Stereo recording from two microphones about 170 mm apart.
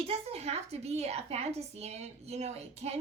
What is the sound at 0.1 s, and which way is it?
A woman's voice, 35° right (ahead or behind).